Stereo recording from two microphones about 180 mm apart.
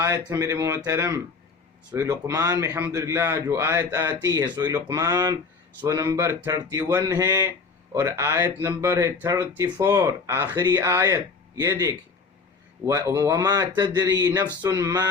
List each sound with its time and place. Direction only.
0.0 s a man's voice: 15° right (ahead or behind)